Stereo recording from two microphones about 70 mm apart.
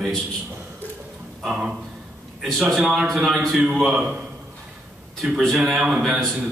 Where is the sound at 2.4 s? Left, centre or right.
Centre.